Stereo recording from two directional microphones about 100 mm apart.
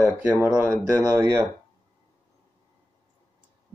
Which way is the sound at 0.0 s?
20° right (ahead or behind).